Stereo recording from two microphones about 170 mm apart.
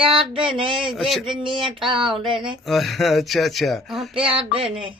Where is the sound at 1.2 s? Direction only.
30° right (ahead or behind).